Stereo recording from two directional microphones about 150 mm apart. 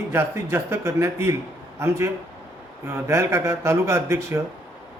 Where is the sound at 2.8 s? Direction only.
20° right (ahead or behind).